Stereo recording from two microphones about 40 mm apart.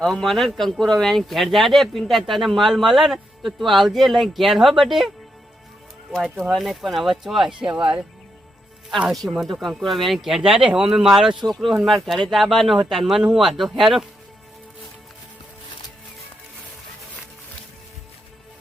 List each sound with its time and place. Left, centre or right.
0.0 s speech: centre
6.1 s speech: centre
6.5 s speech: centre
7.6 s speech: right
9.1 s speech: centre
11.7 s speech: centre